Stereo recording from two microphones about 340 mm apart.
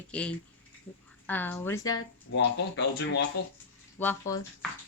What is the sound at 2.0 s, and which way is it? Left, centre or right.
Speech, left.